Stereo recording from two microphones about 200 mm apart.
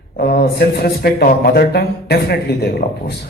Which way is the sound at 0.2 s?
50° left (ahead or behind).